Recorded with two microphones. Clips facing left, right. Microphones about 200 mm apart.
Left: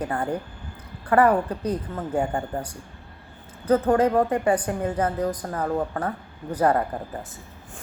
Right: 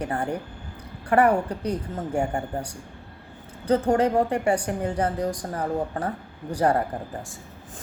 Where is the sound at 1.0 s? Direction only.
25° right (ahead or behind).